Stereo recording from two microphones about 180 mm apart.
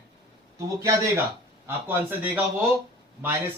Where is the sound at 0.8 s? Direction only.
15° right (ahead or behind).